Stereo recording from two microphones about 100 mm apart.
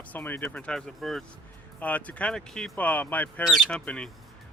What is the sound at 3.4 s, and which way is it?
Speech, 5° left (ahead or behind).